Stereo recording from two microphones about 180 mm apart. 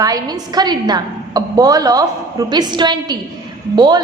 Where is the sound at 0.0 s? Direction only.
20° right (ahead or behind).